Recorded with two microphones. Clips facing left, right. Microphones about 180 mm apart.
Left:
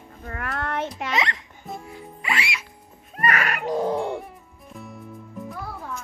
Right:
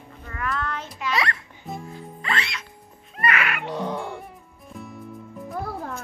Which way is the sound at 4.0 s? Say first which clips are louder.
Left 6 dB; centre (ahead or behind).